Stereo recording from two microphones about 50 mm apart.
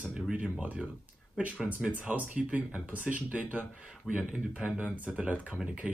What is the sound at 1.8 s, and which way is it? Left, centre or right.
Speech, right.